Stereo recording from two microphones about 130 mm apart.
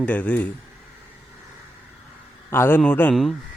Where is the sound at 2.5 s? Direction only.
15° left (ahead or behind).